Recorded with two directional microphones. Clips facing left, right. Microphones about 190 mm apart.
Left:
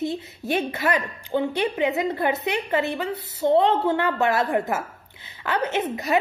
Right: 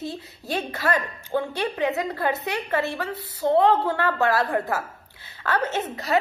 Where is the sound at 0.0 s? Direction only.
20° left (ahead or behind).